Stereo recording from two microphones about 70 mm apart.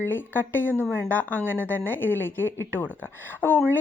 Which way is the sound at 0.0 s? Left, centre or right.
Left.